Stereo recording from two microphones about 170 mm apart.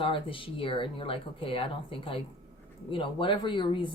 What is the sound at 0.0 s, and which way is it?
Speech, 30° left (ahead or behind).